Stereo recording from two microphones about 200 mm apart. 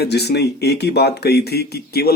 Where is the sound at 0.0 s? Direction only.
55° left (ahead or behind).